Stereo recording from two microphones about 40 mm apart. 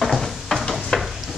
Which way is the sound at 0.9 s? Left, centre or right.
Left.